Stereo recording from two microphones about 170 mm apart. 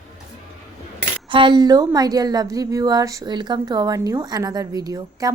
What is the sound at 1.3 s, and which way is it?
A woman's voice, 30° right (ahead or behind).